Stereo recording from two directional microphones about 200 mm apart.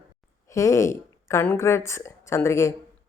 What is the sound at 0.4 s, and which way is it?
A woman's voice, 15° left (ahead or behind).